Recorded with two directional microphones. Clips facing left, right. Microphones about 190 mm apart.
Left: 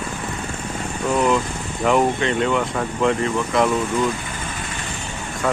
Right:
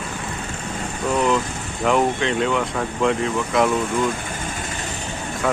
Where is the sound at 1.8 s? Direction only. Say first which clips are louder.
Left 1 dB; centre (ahead or behind).